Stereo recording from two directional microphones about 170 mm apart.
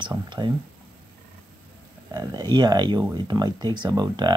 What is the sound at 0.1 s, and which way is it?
Speech, 25° right (ahead or behind).